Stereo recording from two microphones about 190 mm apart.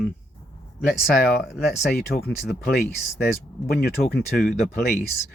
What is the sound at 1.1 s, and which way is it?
Speech, 55° left (ahead or behind).